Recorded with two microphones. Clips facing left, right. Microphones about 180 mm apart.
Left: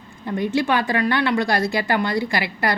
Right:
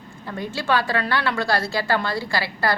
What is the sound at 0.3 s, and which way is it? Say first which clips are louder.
A woman's voice: left 4 dB; 20° left (ahead or behind).